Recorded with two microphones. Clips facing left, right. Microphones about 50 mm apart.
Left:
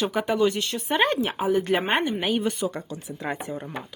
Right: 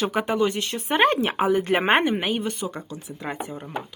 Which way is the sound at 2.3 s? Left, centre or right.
Centre.